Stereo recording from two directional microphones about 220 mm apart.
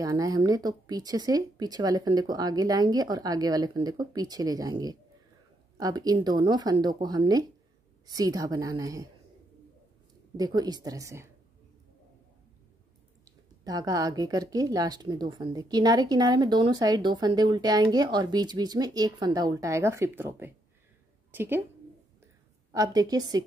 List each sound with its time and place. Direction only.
0.0 s a woman's voice: 15° right (ahead or behind)
10.3 s a woman's voice: 15° right (ahead or behind)
13.7 s a woman's voice: 15° right (ahead or behind)
22.7 s a woman's voice: 15° right (ahead or behind)